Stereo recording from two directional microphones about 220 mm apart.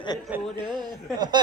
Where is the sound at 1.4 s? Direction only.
20° right (ahead or behind).